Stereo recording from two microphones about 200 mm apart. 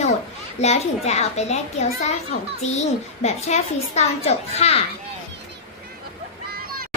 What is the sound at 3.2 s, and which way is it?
A child's voice, 35° left (ahead or behind).